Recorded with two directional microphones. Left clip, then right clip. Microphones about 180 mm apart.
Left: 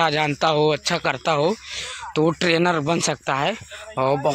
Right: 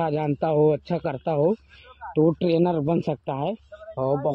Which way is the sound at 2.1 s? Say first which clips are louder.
Left 1 dB; 10° left (ahead or behind).